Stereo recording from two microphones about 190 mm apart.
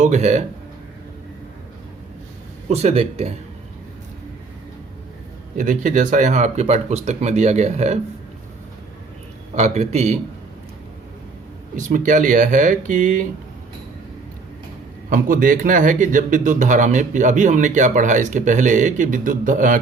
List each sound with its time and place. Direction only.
0.0 s speech: 35° right (ahead or behind)
2.6 s speech: 35° right (ahead or behind)
5.5 s speech: 40° right (ahead or behind)
9.6 s speech: 35° right (ahead or behind)
11.8 s speech: 40° right (ahead or behind)
15.1 s speech: 45° right (ahead or behind)